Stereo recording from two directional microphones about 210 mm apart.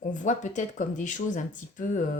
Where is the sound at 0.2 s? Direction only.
35° left (ahead or behind).